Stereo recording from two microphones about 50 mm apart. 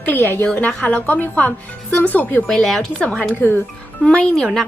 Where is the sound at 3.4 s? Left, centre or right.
Left.